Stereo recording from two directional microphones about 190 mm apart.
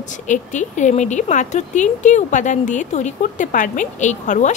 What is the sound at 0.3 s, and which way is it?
Speech, 40° left (ahead or behind).